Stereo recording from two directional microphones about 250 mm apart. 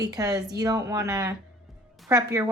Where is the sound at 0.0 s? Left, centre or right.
Centre.